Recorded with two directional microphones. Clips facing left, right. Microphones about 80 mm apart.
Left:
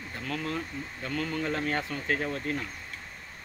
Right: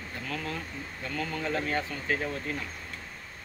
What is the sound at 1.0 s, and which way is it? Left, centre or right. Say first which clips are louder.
Speech: left 1 dB; left.